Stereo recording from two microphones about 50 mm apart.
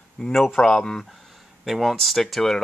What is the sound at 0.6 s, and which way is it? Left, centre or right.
Speech, centre.